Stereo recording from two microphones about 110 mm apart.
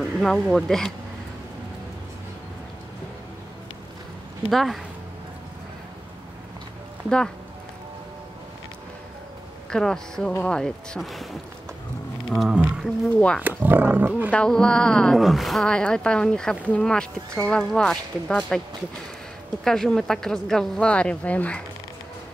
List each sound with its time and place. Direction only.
0.2 s speech: 5° left (ahead or behind)
4.5 s speech: centre (ahead or behind)
9.7 s speech: 5° left (ahead or behind)
12.3 s speech: centre (ahead or behind)
13.4 s speech: 15° right (ahead or behind)
14.3 s speech: 10° left (ahead or behind)
19.6 s speech: 5° left (ahead or behind)